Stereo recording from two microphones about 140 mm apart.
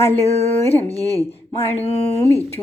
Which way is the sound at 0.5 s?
15° left (ahead or behind).